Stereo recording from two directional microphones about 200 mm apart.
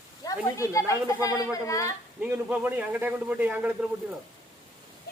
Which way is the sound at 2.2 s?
10° right (ahead or behind).